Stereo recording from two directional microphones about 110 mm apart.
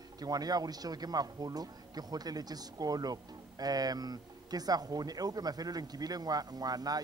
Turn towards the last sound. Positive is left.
turn(degrees=-35)  # may be behind; listen again after turning